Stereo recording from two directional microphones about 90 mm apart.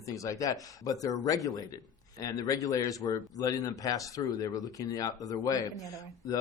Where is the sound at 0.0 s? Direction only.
35° left (ahead or behind).